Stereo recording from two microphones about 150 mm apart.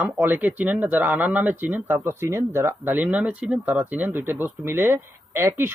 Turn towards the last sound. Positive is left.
turn(degrees=-15)  # may be behind; listen again after turning